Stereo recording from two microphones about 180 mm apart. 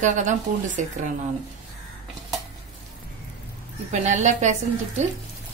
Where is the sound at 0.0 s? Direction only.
40° right (ahead or behind).